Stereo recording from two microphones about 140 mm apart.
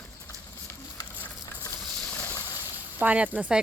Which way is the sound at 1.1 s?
10° left (ahead or behind).